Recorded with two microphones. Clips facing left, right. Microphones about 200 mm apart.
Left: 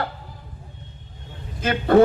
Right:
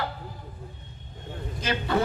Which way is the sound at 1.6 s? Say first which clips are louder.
Left 9 dB; 55° left (ahead or behind).